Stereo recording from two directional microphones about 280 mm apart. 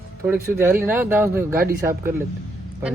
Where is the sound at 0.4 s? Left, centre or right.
Centre.